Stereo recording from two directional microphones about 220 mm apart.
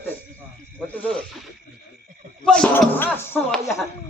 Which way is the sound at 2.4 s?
5° left (ahead or behind).